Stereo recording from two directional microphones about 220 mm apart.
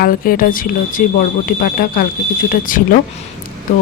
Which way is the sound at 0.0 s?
40° left (ahead or behind).